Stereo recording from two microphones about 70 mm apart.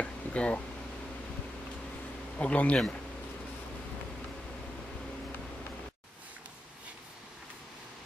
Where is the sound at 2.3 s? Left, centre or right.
Centre.